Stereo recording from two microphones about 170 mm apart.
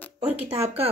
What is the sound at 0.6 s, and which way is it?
Speech, 35° right (ahead or behind).